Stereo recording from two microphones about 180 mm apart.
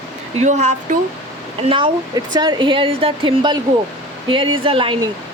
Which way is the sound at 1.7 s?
25° right (ahead or behind).